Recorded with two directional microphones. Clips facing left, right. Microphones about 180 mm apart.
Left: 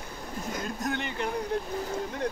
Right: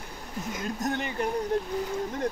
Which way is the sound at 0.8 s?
45° right (ahead or behind).